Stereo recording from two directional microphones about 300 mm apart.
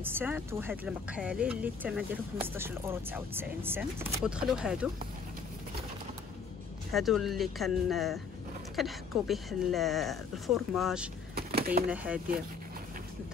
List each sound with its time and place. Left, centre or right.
0.0 s speech: centre
6.9 s speech: centre
11.3 s a sound: right
11.9 s speech: centre